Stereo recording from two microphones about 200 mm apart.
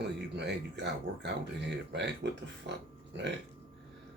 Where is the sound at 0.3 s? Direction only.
60° right (ahead or behind).